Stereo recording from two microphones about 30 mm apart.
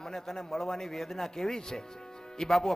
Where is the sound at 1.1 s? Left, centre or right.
Centre.